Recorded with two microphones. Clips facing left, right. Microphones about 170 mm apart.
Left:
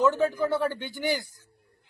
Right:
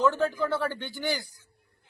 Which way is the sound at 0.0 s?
15° left (ahead or behind).